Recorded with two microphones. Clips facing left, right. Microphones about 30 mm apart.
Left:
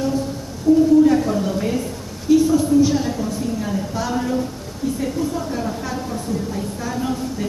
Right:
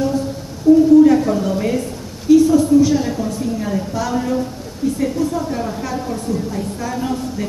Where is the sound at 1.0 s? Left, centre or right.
Centre.